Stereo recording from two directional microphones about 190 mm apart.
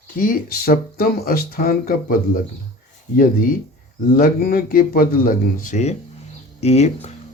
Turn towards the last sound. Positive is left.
turn(degrees=35)  # may be behind; listen again after turning